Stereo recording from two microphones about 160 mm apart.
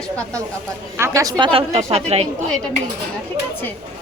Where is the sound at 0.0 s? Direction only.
5° left (ahead or behind).